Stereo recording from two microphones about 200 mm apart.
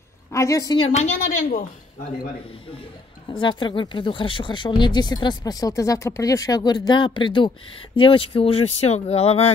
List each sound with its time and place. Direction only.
0.3 s a woman's voice: 15° left (ahead or behind)
0.8 s a woman's voice: 35° left (ahead or behind)
3.3 s speech: 25° left (ahead or behind)